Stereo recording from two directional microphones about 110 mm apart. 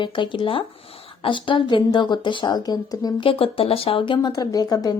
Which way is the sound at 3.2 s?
60° left (ahead or behind).